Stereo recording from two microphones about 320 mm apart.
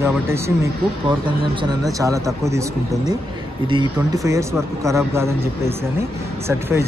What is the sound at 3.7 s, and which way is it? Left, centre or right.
Speech, centre.